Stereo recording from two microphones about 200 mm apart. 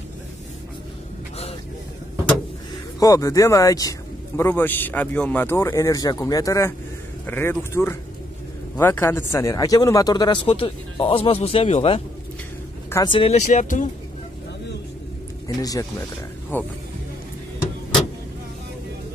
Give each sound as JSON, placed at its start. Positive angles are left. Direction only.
{"t": 3.0, "sound": "speech", "side_deg": 15}
{"t": 15.4, "sound": "speech", "side_deg": 20}